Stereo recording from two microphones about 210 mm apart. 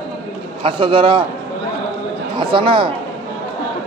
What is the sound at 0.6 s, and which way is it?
Speech, 25° right (ahead or behind).